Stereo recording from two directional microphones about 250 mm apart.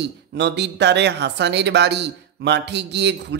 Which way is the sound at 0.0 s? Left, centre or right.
Right.